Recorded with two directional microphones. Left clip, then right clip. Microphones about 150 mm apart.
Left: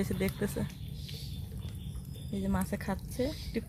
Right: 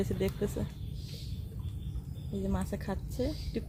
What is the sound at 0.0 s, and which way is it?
Speech, 15° left (ahead or behind).